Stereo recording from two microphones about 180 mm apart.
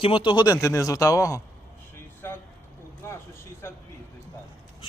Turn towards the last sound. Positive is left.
turn(degrees=15)  # may be behind; listen again after turning